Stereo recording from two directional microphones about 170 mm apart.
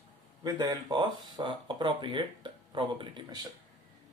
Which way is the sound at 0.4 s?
20° right (ahead or behind).